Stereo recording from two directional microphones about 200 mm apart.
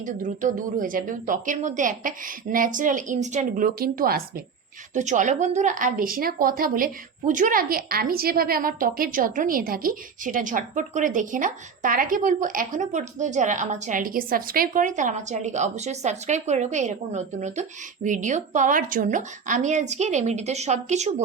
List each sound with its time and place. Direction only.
0.0 s a woman's voice: 40° right (ahead or behind)